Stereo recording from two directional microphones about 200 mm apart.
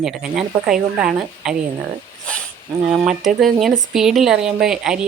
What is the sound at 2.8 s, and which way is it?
Speech, 5° right (ahead or behind).